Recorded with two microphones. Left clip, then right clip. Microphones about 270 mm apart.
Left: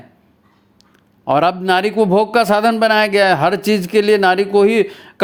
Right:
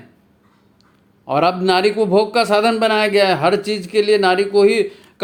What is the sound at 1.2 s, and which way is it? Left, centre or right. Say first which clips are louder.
A man's voice: left 2 dB; left.